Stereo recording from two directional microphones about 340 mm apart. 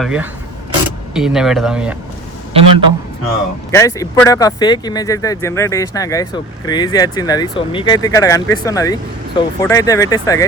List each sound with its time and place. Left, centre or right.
0.0 s speech: centre
2.5 s a man's voice: centre
3.7 s speech: centre